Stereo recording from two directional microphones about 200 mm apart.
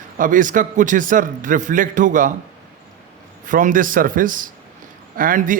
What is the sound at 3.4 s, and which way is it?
A man's voice, 40° right (ahead or behind).